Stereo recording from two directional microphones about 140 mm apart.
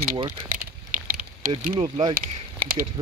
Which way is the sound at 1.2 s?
85° right.